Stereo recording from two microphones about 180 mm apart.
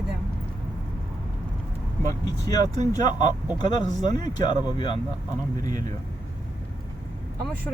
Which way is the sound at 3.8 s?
40° right (ahead or behind).